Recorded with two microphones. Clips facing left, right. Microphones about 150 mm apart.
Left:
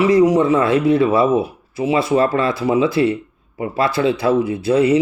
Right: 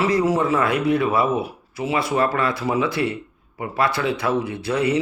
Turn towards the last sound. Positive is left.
turn(degrees=25)  # may be behind; listen again after turning